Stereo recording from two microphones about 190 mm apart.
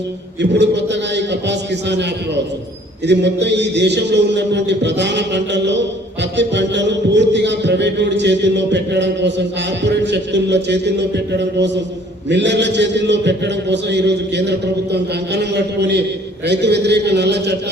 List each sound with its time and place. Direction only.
0.6 s a man's voice: 65° right (ahead or behind)